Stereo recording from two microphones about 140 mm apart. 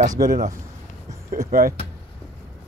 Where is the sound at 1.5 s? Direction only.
90° right.